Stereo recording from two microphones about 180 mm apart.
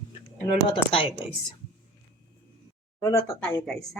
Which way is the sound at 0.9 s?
30° left (ahead or behind).